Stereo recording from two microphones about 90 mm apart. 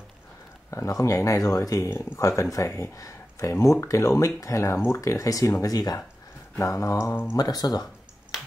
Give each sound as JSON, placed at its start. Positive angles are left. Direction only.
{"t": 0.7, "sound": "speech", "side_deg": 35}
{"t": 7.3, "sound": "speech", "side_deg": 45}